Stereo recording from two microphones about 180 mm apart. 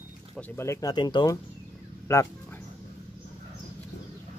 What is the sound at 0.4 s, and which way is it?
Speech, 15° left (ahead or behind).